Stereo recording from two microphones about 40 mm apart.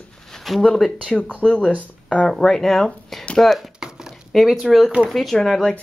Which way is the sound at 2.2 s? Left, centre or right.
Centre.